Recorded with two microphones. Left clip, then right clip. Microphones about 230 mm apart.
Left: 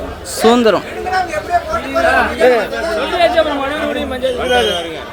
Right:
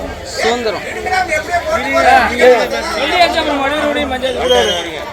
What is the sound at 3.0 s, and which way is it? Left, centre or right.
A woman's voice, left.